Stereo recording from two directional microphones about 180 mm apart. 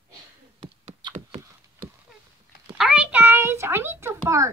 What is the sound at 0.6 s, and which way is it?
Beatboxing, 35° right (ahead or behind).